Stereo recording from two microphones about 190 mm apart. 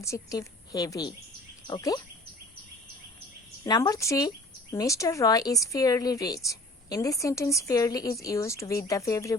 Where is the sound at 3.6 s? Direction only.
20° left (ahead or behind).